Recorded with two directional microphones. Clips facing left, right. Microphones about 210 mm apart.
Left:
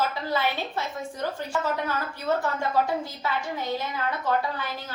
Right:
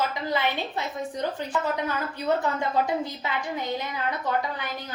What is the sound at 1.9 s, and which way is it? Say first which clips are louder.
A woman's voice: right 1 dB; 20° right (ahead or behind).